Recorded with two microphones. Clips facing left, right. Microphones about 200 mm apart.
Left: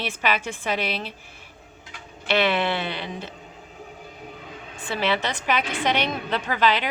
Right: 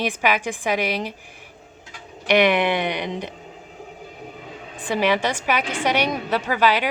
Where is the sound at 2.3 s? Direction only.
15° right (ahead or behind).